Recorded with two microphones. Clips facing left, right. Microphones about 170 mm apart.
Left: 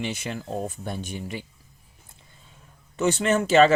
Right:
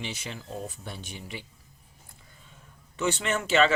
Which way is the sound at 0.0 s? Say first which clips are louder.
Left 7 dB; 55° left (ahead or behind).